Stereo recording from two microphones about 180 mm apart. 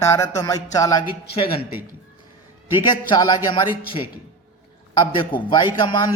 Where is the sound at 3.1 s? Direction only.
20° left (ahead or behind).